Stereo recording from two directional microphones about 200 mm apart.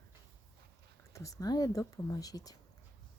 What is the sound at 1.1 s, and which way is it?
Speech, 15° left (ahead or behind).